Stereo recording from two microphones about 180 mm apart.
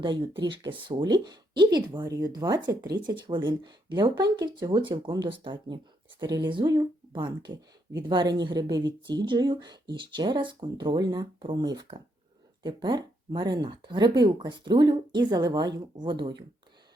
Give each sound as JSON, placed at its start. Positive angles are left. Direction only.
{"t": 0.0, "sound": "speech", "side_deg": -25}